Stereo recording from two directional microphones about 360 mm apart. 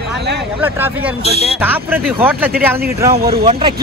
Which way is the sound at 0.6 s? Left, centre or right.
Centre.